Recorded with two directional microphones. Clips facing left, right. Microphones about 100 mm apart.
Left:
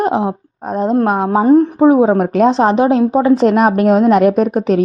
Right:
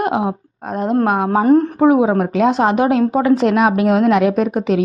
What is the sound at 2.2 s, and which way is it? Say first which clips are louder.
Speech: left 3 dB; 45° left (ahead or behind).